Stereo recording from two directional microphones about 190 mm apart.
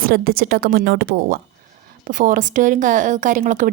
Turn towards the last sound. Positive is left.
turn(degrees=-40)  # may be behind; listen again after turning